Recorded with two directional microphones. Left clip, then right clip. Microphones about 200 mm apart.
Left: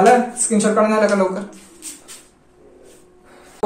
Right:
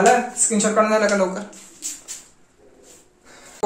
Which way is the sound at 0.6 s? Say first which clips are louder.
Left 2 dB; 15° right (ahead or behind).